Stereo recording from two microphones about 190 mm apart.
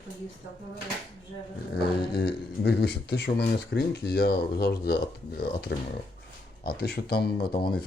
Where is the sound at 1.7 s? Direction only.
55° left (ahead or behind).